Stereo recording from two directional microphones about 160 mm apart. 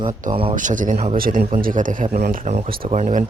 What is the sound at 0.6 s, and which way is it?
Speech, 55° right (ahead or behind).